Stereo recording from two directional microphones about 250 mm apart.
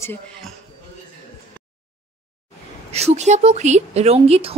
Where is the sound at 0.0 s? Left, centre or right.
Centre.